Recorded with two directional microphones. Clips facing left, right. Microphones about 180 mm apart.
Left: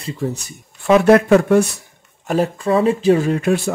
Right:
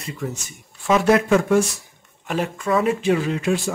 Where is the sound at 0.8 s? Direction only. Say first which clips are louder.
Left 6 dB; 60° left (ahead or behind).